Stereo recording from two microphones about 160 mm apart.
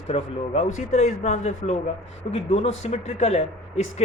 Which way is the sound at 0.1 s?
40° left (ahead or behind).